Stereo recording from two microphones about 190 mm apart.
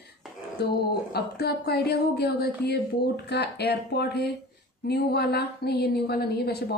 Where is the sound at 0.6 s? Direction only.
60° left (ahead or behind).